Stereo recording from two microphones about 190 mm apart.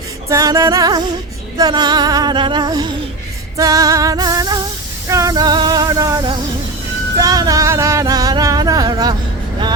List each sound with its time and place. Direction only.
0.3 s music: 15° right (ahead or behind)
5.0 s female singing: 15° right (ahead or behind)
7.2 s music: 20° right (ahead or behind)